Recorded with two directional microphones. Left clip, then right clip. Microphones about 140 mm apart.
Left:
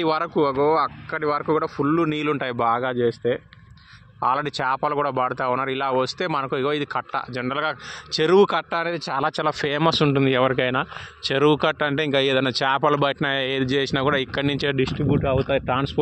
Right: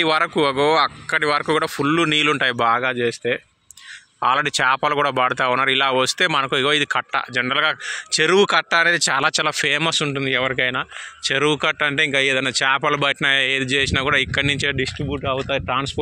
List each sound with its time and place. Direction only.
0.0 s speech: 5° right (ahead or behind)
0.5 s speech: 40° right (ahead or behind)
1.1 s speech: 10° right (ahead or behind)
2.8 s speech: 10° left (ahead or behind)
4.2 s speech: 5° right (ahead or behind)
8.2 s speech: 10° left (ahead or behind)
8.5 s speech: 5° right (ahead or behind)
9.2 s speech: 5° left (ahead or behind)
9.9 s speech: 35° left (ahead or behind)
11.2 s speech: 20° left (ahead or behind)
14.8 s speech: 40° left (ahead or behind)